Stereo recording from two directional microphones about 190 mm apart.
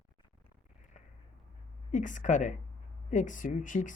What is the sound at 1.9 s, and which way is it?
A woman's voice, 40° left (ahead or behind).